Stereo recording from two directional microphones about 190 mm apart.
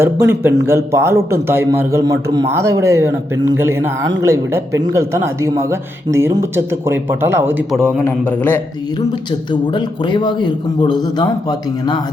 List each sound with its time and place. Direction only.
0.0 s a man's voice: 15° right (ahead or behind)
7.9 s a man's voice: 5° left (ahead or behind)
9.5 s a man's voice: 25° left (ahead or behind)